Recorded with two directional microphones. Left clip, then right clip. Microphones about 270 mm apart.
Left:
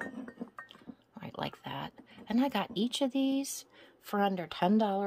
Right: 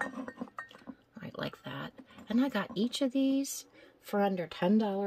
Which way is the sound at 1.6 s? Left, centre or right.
Centre.